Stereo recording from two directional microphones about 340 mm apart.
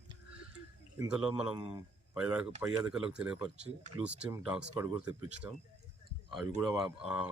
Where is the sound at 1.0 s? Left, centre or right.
Centre.